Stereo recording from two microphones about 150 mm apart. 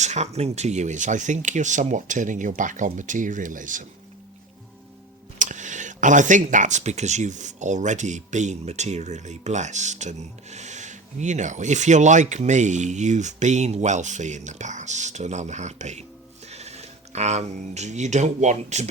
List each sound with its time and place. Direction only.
0.0 s speech: 50° right (ahead or behind)
5.4 s speech: 55° right (ahead or behind)